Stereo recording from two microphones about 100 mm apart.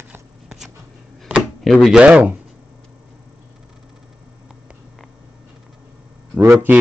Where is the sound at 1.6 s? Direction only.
Centre (ahead or behind).